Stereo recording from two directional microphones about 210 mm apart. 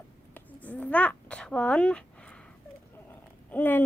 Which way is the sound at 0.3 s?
5° left (ahead or behind).